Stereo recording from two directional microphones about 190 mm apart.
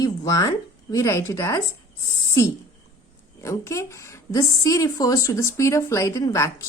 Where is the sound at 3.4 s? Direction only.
15° left (ahead or behind).